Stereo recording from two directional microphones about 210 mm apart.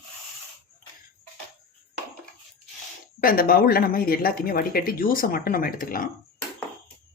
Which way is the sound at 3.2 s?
45° left (ahead or behind).